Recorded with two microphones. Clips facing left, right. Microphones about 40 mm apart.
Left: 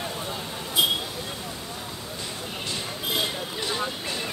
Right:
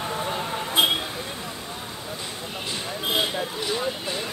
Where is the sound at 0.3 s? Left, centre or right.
Right.